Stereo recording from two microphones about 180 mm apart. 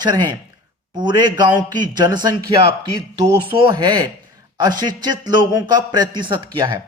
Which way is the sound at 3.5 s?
25° right (ahead or behind).